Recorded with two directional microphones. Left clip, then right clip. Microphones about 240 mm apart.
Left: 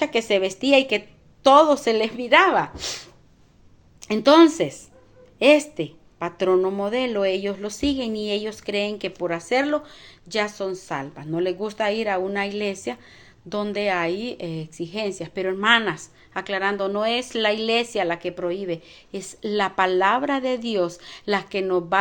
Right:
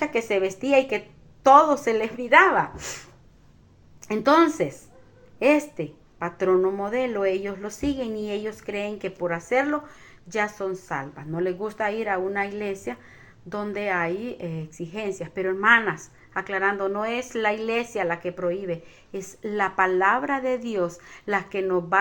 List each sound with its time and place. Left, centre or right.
0.0 s a woman's voice: left
4.4 s a woman's voice: left
10.8 s a woman's voice: left